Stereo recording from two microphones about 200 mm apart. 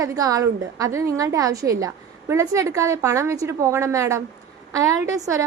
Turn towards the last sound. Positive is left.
turn(degrees=-15)  # may be behind; listen again after turning